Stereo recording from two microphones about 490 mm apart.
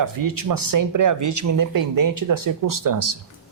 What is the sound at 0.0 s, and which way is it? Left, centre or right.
Speech, right.